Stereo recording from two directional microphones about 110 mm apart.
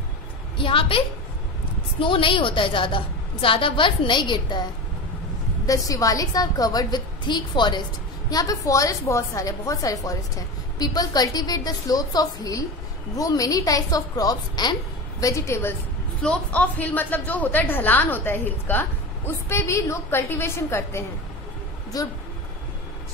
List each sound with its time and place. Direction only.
0.6 s a woman's voice: 50° left (ahead or behind)
5.7 s a woman's voice: 30° left (ahead or behind)
16.2 s a woman's voice: 10° left (ahead or behind)
21.9 s a woman's voice: 35° left (ahead or behind)